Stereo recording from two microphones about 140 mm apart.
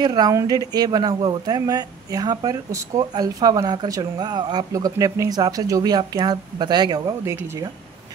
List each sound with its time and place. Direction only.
0.0 s speech: 30° right (ahead or behind)